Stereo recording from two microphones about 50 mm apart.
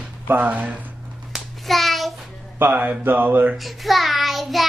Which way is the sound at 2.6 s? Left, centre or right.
Right.